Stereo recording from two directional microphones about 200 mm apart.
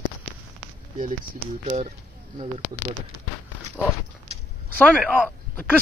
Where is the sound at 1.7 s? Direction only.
35° right (ahead or behind).